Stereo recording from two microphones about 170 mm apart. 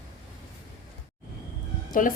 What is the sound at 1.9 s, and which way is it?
Speech, 50° left (ahead or behind).